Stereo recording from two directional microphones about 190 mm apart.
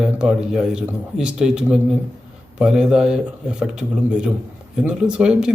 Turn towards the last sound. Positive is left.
turn(degrees=-5)  # may be behind; listen again after turning